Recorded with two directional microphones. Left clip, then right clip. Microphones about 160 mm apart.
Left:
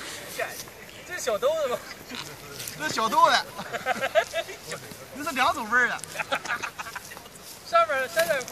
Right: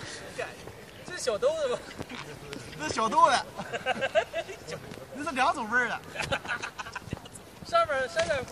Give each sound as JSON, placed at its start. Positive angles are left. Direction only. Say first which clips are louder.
{"t": 1.1, "sound": "speech", "louder": "left 3 dB", "side_deg": -30}
{"t": 2.8, "sound": "speech", "louder": "left 2 dB", "side_deg": -15}
{"t": 3.7, "sound": "speech", "louder": "left 3 dB", "side_deg": -35}
{"t": 5.2, "sound": "speech", "louder": "left 2 dB", "side_deg": -20}
{"t": 6.1, "sound": "chicken", "louder": "left 3 dB", "side_deg": -35}
{"t": 7.7, "sound": "a sound", "louder": "left 3 dB", "side_deg": -35}